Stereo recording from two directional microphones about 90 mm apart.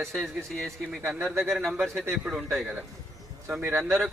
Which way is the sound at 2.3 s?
Centre (ahead or behind).